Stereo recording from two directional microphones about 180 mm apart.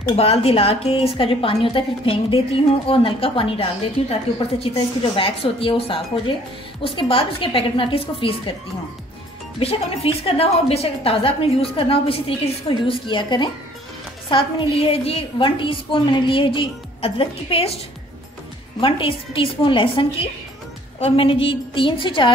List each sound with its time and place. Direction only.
0.1 s a woman's voice: 35° left (ahead or behind)
9.6 s a woman's voice: 30° left (ahead or behind)
18.8 s a woman's voice: 30° left (ahead or behind)